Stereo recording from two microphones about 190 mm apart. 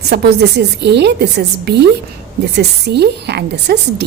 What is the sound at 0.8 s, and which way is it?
A woman's voice, 60° right (ahead or behind).